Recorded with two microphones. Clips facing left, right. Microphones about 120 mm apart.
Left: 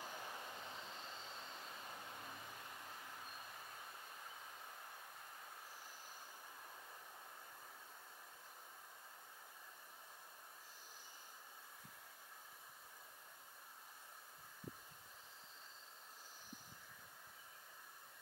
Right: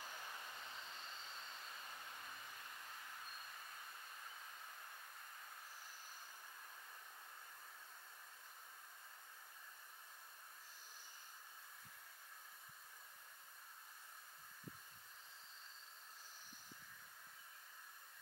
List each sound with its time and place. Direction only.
0.0 s vehicle: 20° left (ahead or behind)